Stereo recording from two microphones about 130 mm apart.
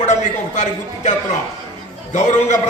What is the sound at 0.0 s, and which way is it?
A man's voice, 65° left (ahead or behind).